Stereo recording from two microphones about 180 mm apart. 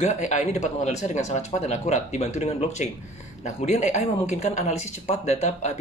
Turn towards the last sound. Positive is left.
turn(degrees=40)  # may be behind; listen again after turning